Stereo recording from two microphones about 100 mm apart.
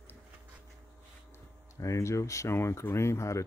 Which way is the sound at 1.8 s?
30° left (ahead or behind).